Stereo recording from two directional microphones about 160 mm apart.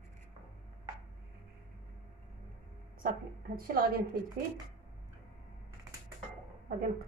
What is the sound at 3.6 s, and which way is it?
Speech, 65° right (ahead or behind).